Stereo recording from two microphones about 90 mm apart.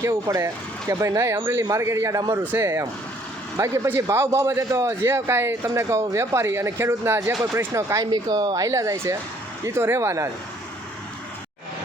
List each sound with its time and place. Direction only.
0.3 s a man's voice: 35° right (ahead or behind)
2.4 s a man's voice: 25° right (ahead or behind)
8.1 s a man's voice: 50° right (ahead or behind); by 10.2 s 30° right (ahead or behind)